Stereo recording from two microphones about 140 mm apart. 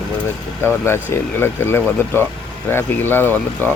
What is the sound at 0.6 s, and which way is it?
Speech, 20° left (ahead or behind).